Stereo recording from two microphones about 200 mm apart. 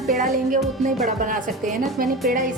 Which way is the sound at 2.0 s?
45° right (ahead or behind).